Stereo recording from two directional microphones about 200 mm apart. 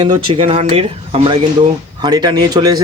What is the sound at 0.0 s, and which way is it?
Speech, 25° right (ahead or behind).